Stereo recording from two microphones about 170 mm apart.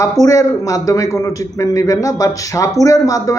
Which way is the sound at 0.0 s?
20° left (ahead or behind).